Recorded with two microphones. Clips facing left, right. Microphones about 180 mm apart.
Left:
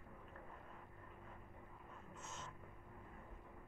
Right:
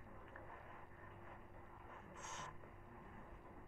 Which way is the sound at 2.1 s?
70° right (ahead or behind).